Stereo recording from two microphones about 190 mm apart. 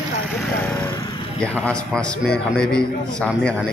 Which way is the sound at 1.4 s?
5° left (ahead or behind).